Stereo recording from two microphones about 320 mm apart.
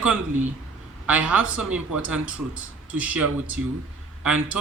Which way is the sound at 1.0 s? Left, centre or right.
Centre.